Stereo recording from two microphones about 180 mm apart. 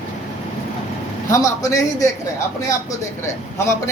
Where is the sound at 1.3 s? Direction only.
20° left (ahead or behind).